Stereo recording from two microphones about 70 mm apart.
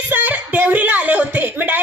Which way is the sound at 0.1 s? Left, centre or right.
Right.